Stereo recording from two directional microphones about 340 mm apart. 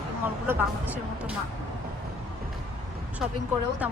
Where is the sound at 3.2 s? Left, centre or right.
Centre.